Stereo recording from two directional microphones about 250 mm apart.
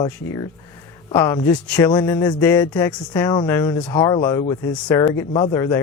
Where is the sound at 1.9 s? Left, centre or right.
Centre.